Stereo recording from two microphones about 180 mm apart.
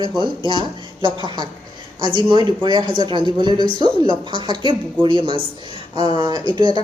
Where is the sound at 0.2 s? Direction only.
25° right (ahead or behind).